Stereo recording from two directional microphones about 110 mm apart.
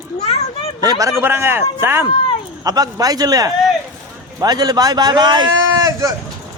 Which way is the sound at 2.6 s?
35° right (ahead or behind).